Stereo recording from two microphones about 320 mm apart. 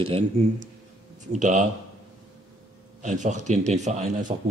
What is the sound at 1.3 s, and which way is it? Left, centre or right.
Speech, right.